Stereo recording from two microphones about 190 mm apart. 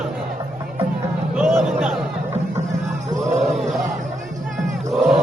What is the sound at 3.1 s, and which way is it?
Music, 40° right (ahead or behind).